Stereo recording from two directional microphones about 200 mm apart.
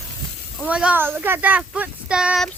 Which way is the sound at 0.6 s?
5° right (ahead or behind).